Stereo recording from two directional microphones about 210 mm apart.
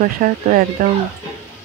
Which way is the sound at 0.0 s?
40° right (ahead or behind).